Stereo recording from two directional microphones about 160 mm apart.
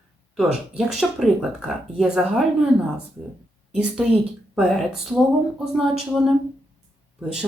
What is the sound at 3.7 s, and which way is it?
Speech, 5° right (ahead or behind).